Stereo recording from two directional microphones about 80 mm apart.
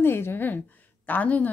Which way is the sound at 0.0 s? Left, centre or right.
Left.